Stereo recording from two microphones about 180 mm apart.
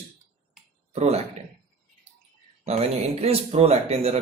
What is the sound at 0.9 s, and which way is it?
Speech, 35° right (ahead or behind).